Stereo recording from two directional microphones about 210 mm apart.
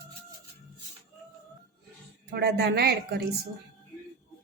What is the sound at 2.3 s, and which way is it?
Speech, 50° right (ahead or behind).